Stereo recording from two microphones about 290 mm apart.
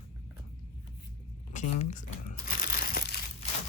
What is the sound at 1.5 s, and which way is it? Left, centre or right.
Speech, left.